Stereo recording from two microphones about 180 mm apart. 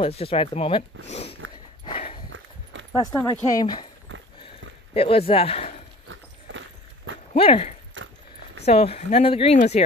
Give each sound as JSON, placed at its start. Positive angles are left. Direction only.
{"t": 0.0, "sound": "speech", "side_deg": 30}
{"t": 1.9, "sound": "walk", "side_deg": 35}
{"t": 2.2, "sound": "walk", "side_deg": -90}
{"t": 3.3, "sound": "speech", "side_deg": 20}
{"t": 4.1, "sound": "clip-clop", "side_deg": -90}
{"t": 4.9, "sound": "speech", "side_deg": 30}
{"t": 6.5, "sound": "walk", "side_deg": -90}
{"t": 7.3, "sound": "speech", "side_deg": 30}
{"t": 8.0, "sound": "a sound", "side_deg": -90}
{"t": 8.6, "sound": "speech", "side_deg": 35}